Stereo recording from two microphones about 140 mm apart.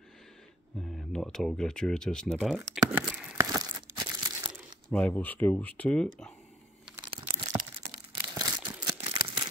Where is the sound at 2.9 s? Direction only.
10° right (ahead or behind).